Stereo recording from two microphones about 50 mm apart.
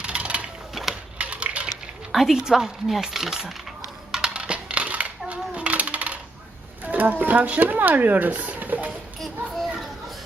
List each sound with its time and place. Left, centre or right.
0.0 s mechanisms: right
0.7 s a sound: centre
1.2 s a sound: right
2.1 s speech: centre
4.1 s coin: centre
6.8 s speech: right
9.2 s children playing: centre